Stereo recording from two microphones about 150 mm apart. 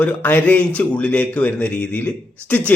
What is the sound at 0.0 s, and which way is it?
A man's voice, 10° left (ahead or behind).